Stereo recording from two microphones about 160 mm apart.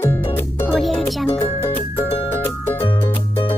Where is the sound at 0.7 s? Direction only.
Centre (ahead or behind).